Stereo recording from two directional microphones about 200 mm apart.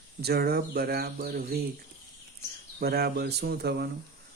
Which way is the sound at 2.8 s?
50° right (ahead or behind).